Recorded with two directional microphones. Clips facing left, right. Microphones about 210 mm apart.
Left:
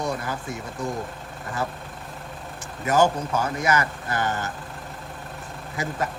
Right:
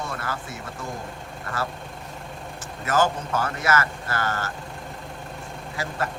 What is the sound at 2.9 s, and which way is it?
Speech, 15° left (ahead or behind).